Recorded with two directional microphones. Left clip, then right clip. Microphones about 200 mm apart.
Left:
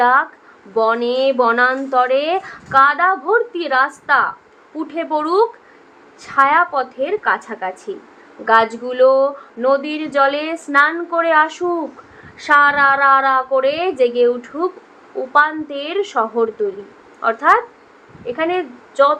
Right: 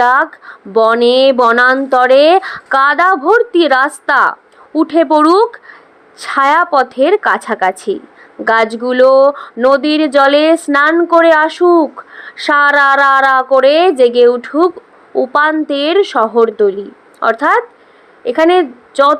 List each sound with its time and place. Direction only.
0.0 s a woman's voice: 40° right (ahead or behind)